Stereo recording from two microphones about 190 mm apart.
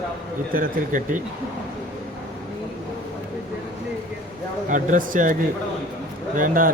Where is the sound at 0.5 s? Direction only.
45° right (ahead or behind).